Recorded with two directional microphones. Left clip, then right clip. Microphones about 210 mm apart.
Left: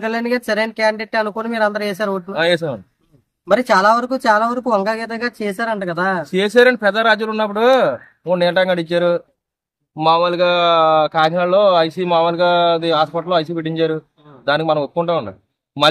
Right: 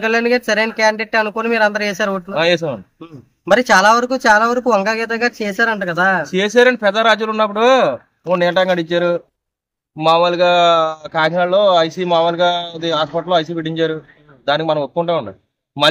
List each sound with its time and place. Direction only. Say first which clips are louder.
0.0 s speech: right 5 dB; 30° right (ahead or behind)
2.3 s speech: right 1 dB; 5° left (ahead or behind)
3.4 s speech: right 2 dB; 30° right (ahead or behind)
6.3 s speech: left 3 dB; 5° left (ahead or behind)